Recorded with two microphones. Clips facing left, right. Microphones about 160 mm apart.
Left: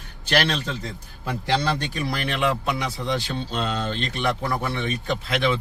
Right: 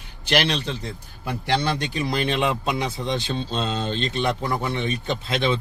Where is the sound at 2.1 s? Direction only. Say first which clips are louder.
Right 1 dB; 25° right (ahead or behind).